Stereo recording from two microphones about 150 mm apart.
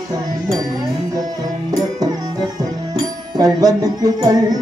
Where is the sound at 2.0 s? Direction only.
25° right (ahead or behind).